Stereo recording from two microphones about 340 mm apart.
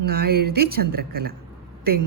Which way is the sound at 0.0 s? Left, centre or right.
Right.